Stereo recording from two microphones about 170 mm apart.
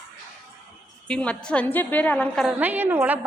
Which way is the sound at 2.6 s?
10° right (ahead or behind).